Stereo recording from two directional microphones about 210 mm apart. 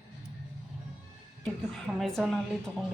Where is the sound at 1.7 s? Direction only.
Centre (ahead or behind).